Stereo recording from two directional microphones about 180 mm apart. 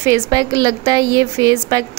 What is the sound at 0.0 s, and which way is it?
A woman's voice, 20° right (ahead or behind).